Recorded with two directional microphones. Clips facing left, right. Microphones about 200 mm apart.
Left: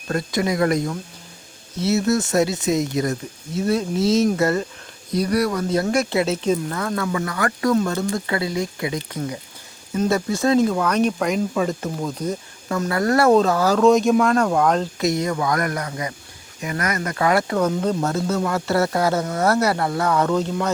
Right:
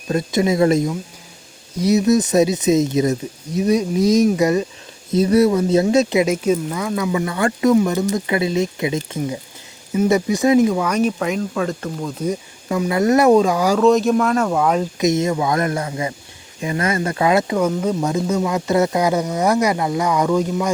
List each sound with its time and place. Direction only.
0.1 s speech: 20° right (ahead or behind); by 12.2 s centre (ahead or behind)
12.2 s speech: 10° right (ahead or behind)
13.8 s speech: centre (ahead or behind)
15.0 s speech: 20° right (ahead or behind)
17.6 s speech: 5° right (ahead or behind)